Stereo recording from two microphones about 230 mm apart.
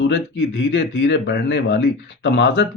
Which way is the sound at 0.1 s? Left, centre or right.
Left.